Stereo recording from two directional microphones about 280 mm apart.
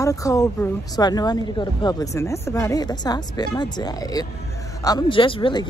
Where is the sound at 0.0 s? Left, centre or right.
Centre.